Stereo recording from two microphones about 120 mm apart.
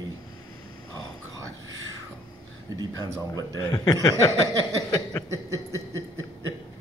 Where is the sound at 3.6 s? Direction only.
30° left (ahead or behind).